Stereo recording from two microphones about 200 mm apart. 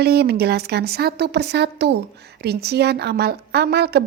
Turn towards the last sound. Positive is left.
turn(degrees=-55)  # may be behind; listen again after turning